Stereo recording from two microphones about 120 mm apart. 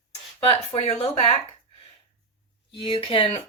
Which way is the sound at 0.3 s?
55° left (ahead or behind).